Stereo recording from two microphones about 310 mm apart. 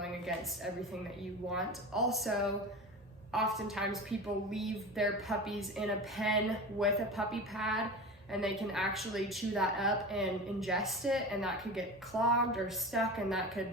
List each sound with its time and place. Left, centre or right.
0.3 s a woman's voice: centre